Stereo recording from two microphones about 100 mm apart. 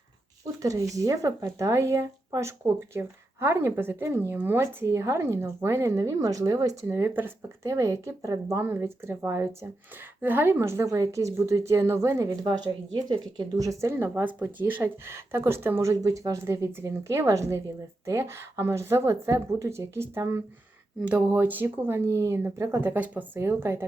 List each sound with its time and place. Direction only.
0.6 s speech: 35° right (ahead or behind)
12.5 s speech: 45° right (ahead or behind)
13.9 s speech: 20° right (ahead or behind)
21.0 s speech: 15° right (ahead or behind)